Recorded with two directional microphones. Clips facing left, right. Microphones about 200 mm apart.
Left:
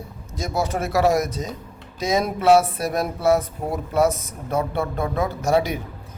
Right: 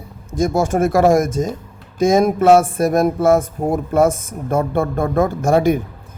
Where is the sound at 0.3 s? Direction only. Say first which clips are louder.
Right 8 dB; 50° right (ahead or behind).